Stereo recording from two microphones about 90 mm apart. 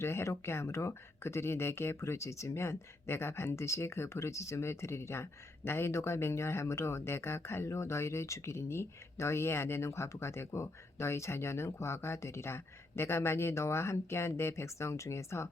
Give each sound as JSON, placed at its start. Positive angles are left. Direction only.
{"t": 0.0, "sound": "speech", "side_deg": 30}